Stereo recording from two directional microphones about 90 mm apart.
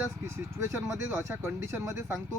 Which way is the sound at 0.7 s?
30° right (ahead or behind).